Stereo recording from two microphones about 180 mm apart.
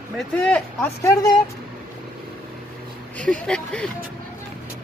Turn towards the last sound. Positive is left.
turn(degrees=5)  # may be behind; listen again after turning